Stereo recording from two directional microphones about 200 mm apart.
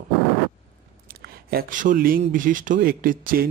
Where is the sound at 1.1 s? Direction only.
50° right (ahead or behind).